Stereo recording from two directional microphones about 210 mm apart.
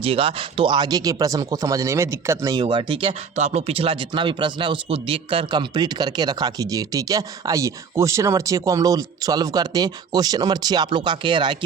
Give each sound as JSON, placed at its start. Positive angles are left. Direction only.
{"t": 0.0, "sound": "speech", "side_deg": -25}